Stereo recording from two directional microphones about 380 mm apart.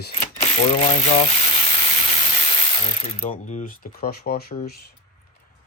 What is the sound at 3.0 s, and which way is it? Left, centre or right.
Speech, centre.